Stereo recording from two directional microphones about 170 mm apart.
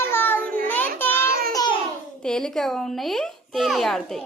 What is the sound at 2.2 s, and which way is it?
A child's voice, 5° left (ahead or behind).